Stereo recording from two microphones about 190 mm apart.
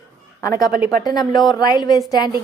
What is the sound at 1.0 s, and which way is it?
A woman's voice, 20° left (ahead or behind).